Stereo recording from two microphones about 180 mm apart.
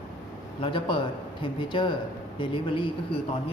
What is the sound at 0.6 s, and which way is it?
Speech, 25° left (ahead or behind).